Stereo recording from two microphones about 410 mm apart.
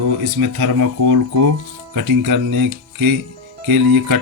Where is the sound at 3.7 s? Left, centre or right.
Right.